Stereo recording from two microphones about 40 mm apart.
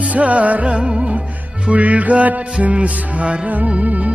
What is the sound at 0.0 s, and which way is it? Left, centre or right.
Music, right.